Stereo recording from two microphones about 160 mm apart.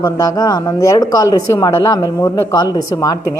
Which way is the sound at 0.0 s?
20° left (ahead or behind).